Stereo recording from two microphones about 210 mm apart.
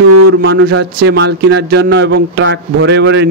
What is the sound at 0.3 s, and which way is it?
A man's voice, 65° right (ahead or behind).